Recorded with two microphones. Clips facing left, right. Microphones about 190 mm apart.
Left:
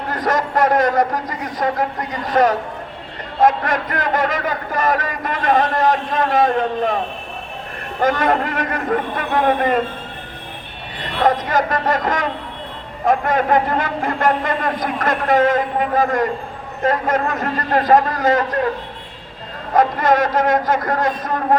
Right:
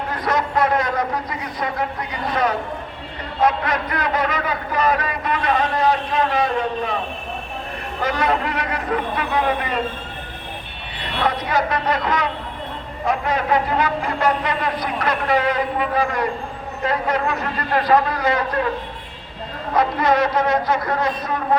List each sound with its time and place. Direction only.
0.1 s a man's voice: 45° left (ahead or behind)
8.0 s a man's voice: 50° left (ahead or behind)
11.2 s a man's voice: 45° left (ahead or behind)
19.7 s a man's voice: 45° left (ahead or behind)